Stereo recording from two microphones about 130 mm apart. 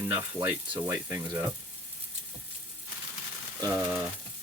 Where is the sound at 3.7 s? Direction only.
25° right (ahead or behind).